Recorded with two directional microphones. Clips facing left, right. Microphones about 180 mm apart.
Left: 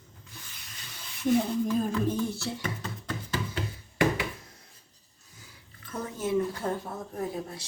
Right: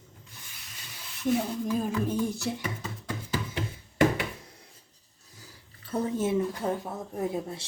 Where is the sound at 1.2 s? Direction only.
Centre (ahead or behind).